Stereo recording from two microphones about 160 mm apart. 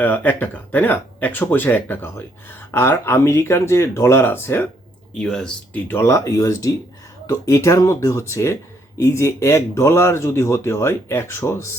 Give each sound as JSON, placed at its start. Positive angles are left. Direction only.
{"t": 0.0, "sound": "speech", "side_deg": 10}